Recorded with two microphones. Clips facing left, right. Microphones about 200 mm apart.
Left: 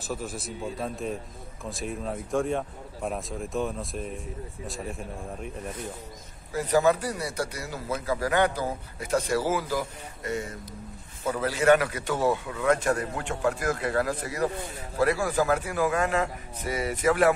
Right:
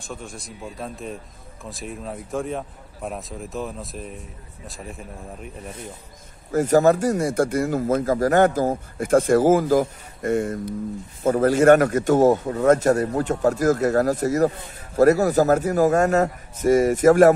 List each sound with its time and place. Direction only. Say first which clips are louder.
0.0 s speech: left 2 dB; 5° left (ahead or behind)
6.5 s a man's voice: right 6 dB; 45° right (ahead or behind)